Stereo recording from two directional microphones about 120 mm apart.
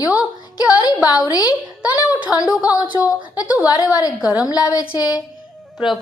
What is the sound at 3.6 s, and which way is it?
Speech, 35° left (ahead or behind).